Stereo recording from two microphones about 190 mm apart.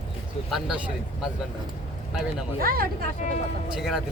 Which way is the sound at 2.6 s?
50° right (ahead or behind).